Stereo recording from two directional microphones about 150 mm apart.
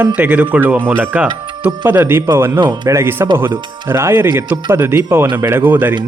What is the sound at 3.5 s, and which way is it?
Speech, 30° right (ahead or behind).